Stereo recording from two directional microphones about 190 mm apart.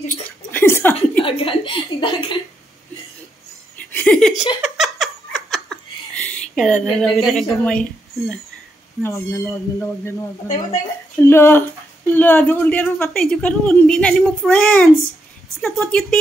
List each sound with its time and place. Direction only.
0.0 s chuckle: 10° left (ahead or behind)
1.2 s a sound: 30° left (ahead or behind)
3.9 s a sound: 5° left (ahead or behind)
4.6 s giggle: centre (ahead or behind)
7.6 s a woman's voice: centre (ahead or behind)
9.0 s a woman's voice: 15° left (ahead or behind)